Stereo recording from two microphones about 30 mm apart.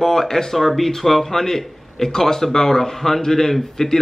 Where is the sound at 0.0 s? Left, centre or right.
Centre.